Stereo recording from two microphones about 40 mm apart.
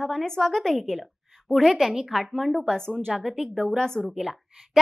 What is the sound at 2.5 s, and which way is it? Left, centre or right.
A woman's voice, centre.